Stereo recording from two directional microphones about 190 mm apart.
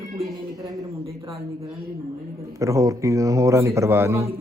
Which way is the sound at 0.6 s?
20° right (ahead or behind).